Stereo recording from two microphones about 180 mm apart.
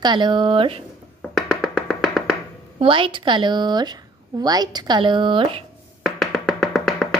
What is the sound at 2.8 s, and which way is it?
A woman's voice, 30° right (ahead or behind).